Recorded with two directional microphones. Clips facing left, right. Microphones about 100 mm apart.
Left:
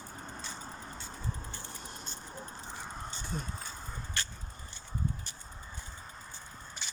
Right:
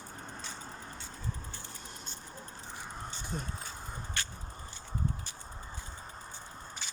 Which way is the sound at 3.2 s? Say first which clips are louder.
Even; 15° right (ahead or behind).